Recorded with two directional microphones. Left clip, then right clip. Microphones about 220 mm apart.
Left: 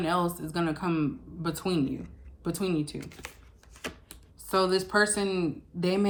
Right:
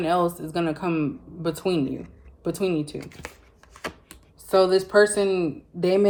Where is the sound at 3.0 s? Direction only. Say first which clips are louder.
Right 4 dB; 5° left (ahead or behind).